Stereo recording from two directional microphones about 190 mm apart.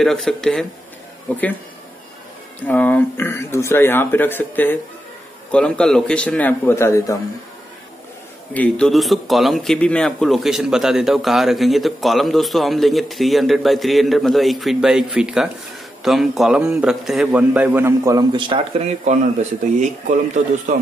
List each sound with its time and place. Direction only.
0.0 s speech: centre (ahead or behind)
2.6 s speech: 10° left (ahead or behind)
8.5 s a man's voice: 5° left (ahead or behind); by 20.2 s 40° right (ahead or behind)